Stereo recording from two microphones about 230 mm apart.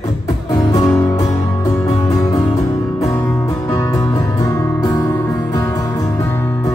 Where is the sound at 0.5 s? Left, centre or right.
Centre.